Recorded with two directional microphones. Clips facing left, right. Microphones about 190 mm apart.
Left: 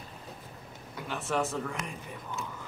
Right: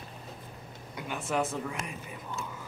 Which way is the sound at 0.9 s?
10° right (ahead or behind).